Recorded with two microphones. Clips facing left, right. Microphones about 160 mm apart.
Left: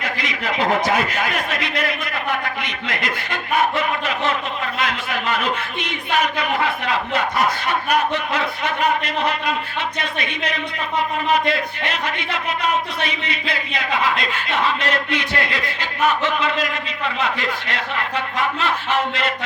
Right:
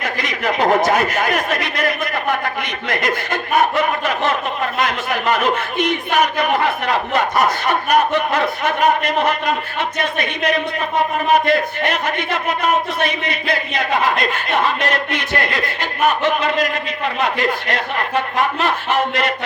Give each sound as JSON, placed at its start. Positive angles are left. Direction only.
{"t": 0.0, "sound": "a man's voice", "side_deg": -45}